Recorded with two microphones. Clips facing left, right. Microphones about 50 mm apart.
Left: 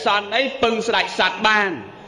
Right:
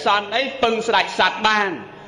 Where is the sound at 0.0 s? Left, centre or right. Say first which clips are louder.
Even; centre.